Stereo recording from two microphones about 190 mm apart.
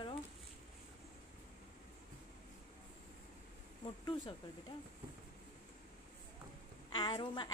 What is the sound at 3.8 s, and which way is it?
Speech, 25° left (ahead or behind).